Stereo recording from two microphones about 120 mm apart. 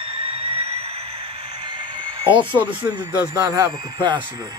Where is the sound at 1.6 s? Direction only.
45° right (ahead or behind).